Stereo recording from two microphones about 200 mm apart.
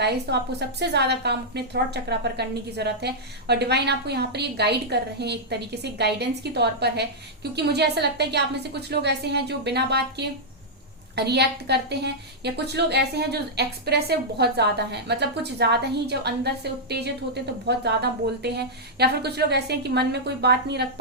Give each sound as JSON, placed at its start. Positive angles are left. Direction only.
{"t": 0.0, "sound": "a woman's voice", "side_deg": -55}